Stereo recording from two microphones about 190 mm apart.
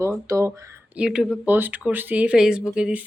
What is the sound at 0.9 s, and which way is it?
Speech, 5° right (ahead or behind).